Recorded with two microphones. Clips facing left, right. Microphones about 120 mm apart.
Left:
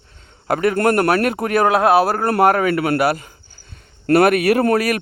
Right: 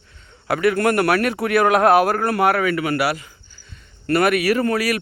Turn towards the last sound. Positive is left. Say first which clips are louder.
# left 3 dB
turn(degrees=45)  # may be behind; listen again after turning